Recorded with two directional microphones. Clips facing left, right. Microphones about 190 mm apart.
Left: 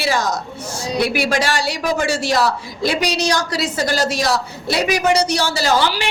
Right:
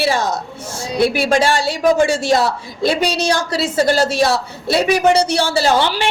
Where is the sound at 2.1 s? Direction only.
50° right (ahead or behind).